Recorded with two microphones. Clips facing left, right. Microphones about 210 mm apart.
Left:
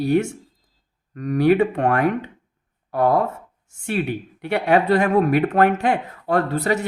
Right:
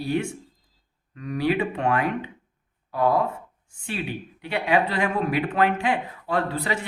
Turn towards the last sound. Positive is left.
turn(degrees=45)  # may be behind; listen again after turning